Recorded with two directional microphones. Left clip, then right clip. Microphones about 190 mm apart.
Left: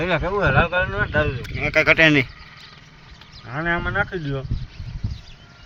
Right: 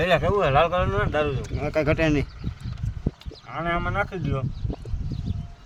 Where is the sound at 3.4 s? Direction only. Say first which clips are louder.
Left 3 dB; 15° right (ahead or behind).